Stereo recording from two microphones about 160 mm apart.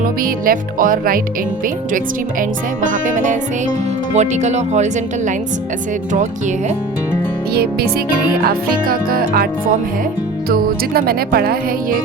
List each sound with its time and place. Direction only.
0.2 s music: 65° right (ahead or behind)
2.4 s music: 55° right (ahead or behind)
4.1 s speech: 45° right (ahead or behind)
7.5 s music: 75° right (ahead or behind)
8.4 s music: 65° right (ahead or behind)
10.5 s music: 70° right (ahead or behind)